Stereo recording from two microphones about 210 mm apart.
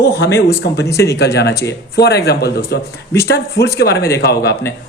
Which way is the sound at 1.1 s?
50° left (ahead or behind).